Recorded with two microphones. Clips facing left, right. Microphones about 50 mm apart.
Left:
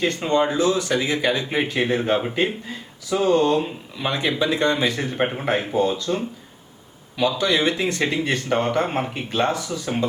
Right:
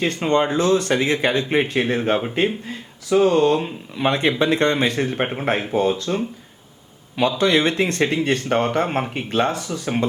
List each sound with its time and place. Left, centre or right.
0.1 s speech: right
7.3 s speech: right